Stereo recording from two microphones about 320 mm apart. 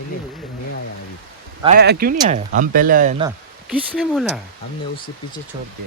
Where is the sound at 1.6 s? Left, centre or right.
Right.